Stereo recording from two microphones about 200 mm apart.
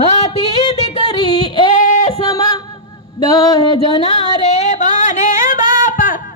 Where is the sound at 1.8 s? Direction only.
40° left (ahead or behind).